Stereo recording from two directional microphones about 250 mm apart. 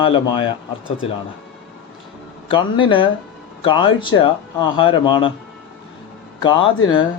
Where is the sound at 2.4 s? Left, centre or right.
Centre.